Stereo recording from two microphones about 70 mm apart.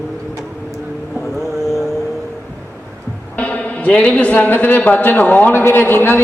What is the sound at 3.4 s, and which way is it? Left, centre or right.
A man's voice, centre.